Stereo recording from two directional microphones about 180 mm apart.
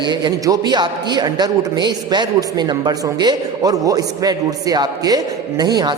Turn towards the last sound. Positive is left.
turn(degrees=-25)  # may be behind; listen again after turning